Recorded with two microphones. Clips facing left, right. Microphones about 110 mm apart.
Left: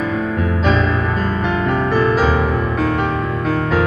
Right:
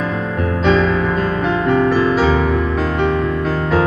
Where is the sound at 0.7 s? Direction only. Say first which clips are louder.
Right 5 dB; centre (ahead or behind).